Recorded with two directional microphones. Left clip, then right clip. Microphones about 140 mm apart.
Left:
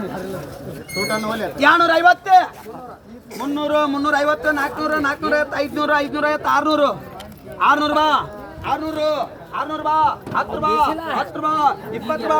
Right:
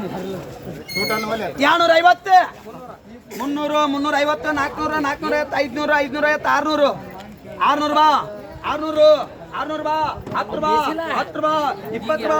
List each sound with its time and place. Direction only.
1.0 s speech: 30° right (ahead or behind)
7.6 s a man's voice: 10° right (ahead or behind)
11.1 s a man's voice: 10° right (ahead or behind)